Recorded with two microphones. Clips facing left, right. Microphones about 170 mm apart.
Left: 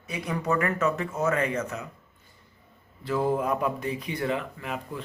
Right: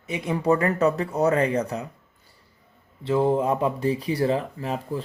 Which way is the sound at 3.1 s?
25° right (ahead or behind).